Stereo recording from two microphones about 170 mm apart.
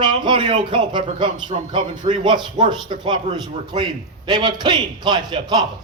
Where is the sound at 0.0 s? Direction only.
30° right (ahead or behind).